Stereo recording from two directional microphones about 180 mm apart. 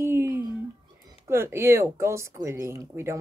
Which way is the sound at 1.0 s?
15° right (ahead or behind).